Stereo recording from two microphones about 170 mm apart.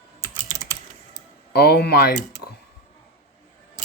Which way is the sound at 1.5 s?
70° left (ahead or behind).